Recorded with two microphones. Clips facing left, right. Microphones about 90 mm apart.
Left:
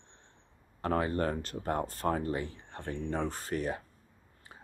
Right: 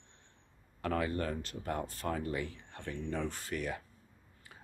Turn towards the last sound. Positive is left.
turn(degrees=35)  # may be behind; listen again after turning